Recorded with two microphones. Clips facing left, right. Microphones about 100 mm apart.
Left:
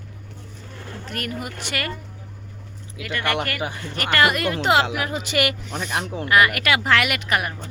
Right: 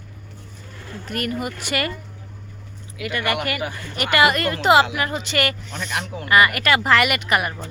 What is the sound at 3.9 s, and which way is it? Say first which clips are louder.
Speech: right 2 dB; 10° right (ahead or behind).